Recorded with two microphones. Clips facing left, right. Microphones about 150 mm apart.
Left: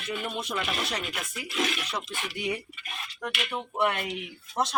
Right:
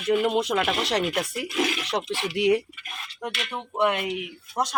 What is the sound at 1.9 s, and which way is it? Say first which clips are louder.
Speech: right 7 dB; 75° right (ahead or behind).